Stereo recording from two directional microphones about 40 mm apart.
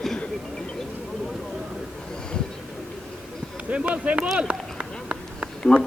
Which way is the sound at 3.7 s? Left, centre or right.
Right.